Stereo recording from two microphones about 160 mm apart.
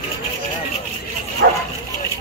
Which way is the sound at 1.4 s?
75° right (ahead or behind).